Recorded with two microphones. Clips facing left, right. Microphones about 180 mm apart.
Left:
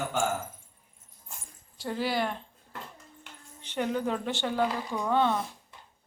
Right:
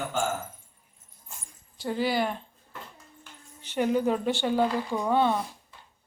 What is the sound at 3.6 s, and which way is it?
A woman's voice, 10° right (ahead or behind).